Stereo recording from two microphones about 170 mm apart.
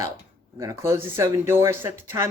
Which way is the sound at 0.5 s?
20° right (ahead or behind).